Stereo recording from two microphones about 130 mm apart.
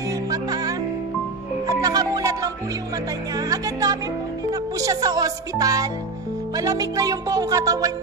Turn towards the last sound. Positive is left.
turn(degrees=-25)  # may be behind; listen again after turning